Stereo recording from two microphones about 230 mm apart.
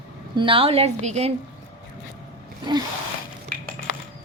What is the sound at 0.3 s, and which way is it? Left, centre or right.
Speech, right.